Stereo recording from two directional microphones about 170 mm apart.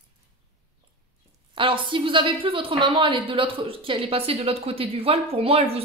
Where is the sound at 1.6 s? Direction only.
30° right (ahead or behind).